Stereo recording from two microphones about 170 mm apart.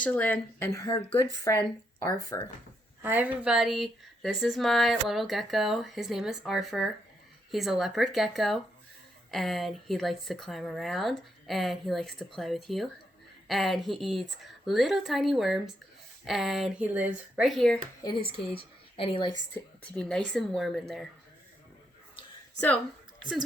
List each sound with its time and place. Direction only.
0.0 s speech: 10° left (ahead or behind)
3.0 s speech: 10° right (ahead or behind)
18.9 s a woman's voice: 30° left (ahead or behind)
19.8 s speech: 5° left (ahead or behind)